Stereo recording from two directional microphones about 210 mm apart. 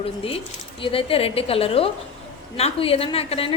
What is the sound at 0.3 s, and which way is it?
A woman's voice, 25° left (ahead or behind).